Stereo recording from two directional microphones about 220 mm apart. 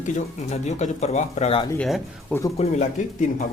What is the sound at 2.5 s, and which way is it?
Speech, 30° left (ahead or behind).